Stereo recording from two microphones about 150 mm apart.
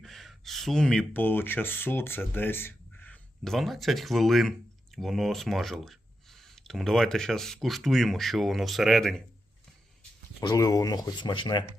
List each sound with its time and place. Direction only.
0.0 s speech: centre (ahead or behind)
10.4 s speech: 25° left (ahead or behind)